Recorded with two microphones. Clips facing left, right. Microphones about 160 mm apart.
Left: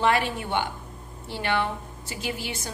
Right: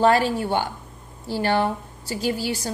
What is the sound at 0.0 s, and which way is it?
A woman's voice, 35° right (ahead or behind).